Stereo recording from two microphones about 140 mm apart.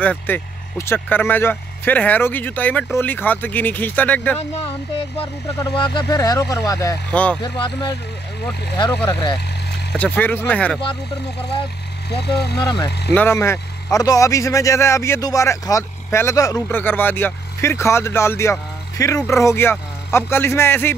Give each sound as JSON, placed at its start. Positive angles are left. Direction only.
{"t": 0.0, "sound": "speech", "side_deg": 10}
{"t": 5.7, "sound": "speech", "side_deg": 35}
{"t": 7.1, "sound": "speech", "side_deg": 10}
{"t": 7.4, "sound": "speech", "side_deg": 35}
{"t": 9.9, "sound": "speech", "side_deg": 10}
{"t": 12.6, "sound": "speech", "side_deg": 30}
{"t": 13.1, "sound": "speech", "side_deg": 15}
{"t": 16.6, "sound": "speech", "side_deg": 15}